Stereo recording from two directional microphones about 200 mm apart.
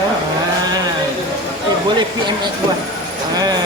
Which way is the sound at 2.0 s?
20° right (ahead or behind).